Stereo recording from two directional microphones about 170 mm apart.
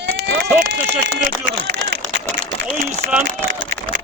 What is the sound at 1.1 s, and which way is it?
Speech, 90° right.